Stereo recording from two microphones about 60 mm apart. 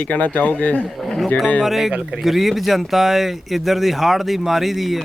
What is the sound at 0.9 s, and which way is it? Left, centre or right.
Speech, centre.